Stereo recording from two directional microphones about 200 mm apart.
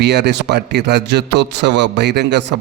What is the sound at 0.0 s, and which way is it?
A man's voice, 60° right (ahead or behind).